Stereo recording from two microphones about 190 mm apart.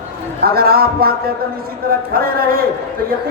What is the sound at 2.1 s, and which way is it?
Speech, 50° right (ahead or behind).